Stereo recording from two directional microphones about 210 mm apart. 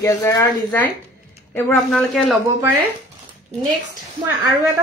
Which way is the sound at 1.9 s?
Centre (ahead or behind).